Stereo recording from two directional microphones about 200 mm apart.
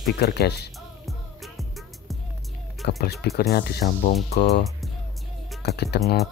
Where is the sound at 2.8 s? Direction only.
55° left (ahead or behind).